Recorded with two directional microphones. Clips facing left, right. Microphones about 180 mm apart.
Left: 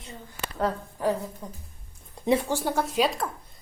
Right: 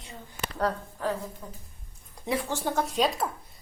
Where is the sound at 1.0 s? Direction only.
10° left (ahead or behind).